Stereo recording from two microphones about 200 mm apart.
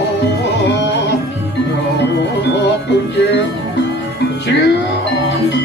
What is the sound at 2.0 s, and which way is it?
Music, 60° left (ahead or behind).